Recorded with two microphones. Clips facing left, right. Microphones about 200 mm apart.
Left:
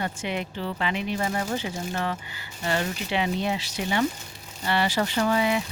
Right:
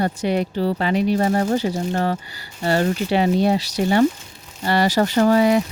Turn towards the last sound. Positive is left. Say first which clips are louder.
# right 8 dB
turn(degrees=-40)  # may be behind; listen again after turning